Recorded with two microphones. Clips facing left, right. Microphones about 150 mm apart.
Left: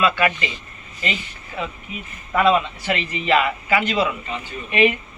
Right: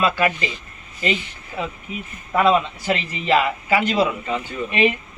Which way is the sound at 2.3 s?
35° right (ahead or behind).